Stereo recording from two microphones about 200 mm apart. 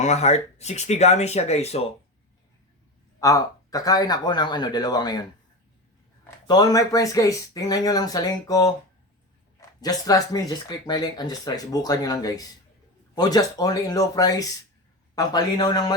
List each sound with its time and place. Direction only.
0.0 s speech: 35° left (ahead or behind)
3.2 s speech: 15° left (ahead or behind)
6.5 s speech: 20° left (ahead or behind)